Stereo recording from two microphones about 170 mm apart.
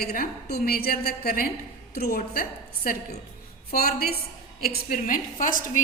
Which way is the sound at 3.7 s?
60° left (ahead or behind).